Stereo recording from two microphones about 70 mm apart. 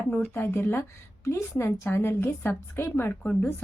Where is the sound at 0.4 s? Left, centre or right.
Left.